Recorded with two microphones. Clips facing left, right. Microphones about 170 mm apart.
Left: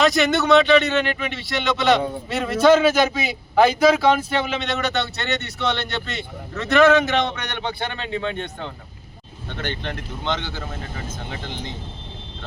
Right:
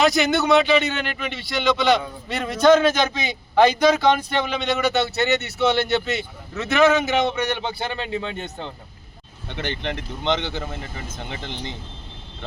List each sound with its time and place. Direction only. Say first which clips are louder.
0.0 s a man's voice: even; centre (ahead or behind)
9.6 s speech: right 2 dB; 15° right (ahead or behind)